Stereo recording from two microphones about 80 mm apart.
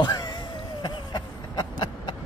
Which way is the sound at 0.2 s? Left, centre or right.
Left.